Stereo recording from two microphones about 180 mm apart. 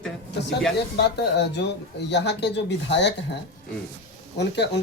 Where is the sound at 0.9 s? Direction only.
70° left (ahead or behind).